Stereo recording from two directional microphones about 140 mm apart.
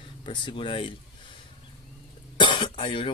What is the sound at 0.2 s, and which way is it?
Speech, 40° left (ahead or behind).